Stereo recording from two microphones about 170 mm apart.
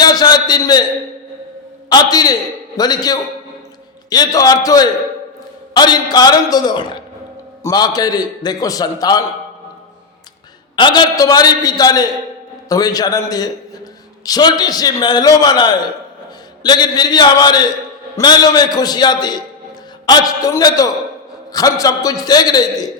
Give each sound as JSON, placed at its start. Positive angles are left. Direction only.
{"t": 0.0, "sound": "a sound", "side_deg": 25}
{"t": 1.9, "sound": "a man's voice", "side_deg": 25}
{"t": 10.8, "sound": "a man's voice", "side_deg": 25}